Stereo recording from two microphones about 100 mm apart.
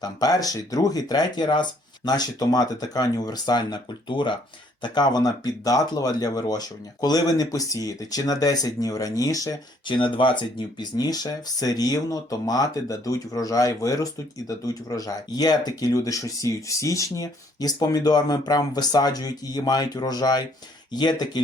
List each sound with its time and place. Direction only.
0.0 s speech: 40° left (ahead or behind)
9.8 s speech: 55° left (ahead or behind)